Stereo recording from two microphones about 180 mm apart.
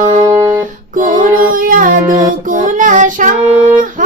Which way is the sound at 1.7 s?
45° right (ahead or behind).